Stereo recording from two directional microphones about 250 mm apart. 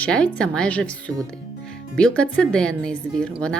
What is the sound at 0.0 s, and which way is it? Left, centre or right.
A woman's voice, centre.